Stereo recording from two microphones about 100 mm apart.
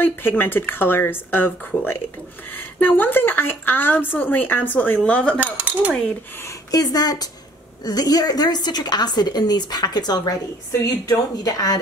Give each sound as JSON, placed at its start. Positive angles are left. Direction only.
{"t": 0.0, "sound": "a woman's voice", "side_deg": 20}
{"t": 5.4, "sound": "speech", "side_deg": -15}
{"t": 6.4, "sound": "a woman's voice", "side_deg": 40}